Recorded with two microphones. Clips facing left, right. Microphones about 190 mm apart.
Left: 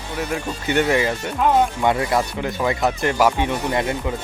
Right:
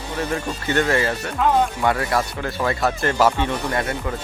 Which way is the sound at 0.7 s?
15° left (ahead or behind).